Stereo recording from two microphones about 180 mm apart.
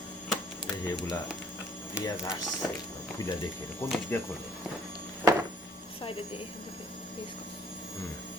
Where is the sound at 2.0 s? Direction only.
15° left (ahead or behind).